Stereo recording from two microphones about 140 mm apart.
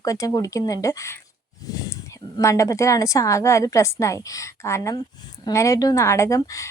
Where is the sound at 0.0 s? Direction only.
25° left (ahead or behind).